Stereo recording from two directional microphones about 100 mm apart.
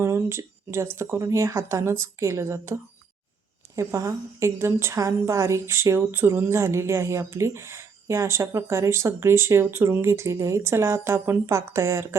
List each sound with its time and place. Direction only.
0.0 s a woman's voice: 25° right (ahead or behind)
3.8 s a woman's voice: 30° right (ahead or behind)